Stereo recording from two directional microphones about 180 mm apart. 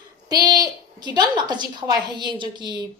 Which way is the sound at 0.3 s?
20° right (ahead or behind).